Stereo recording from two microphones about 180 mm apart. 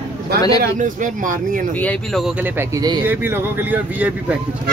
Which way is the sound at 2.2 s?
10° right (ahead or behind).